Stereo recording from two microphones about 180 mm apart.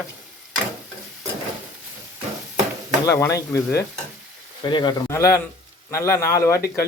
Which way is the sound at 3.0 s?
20° left (ahead or behind).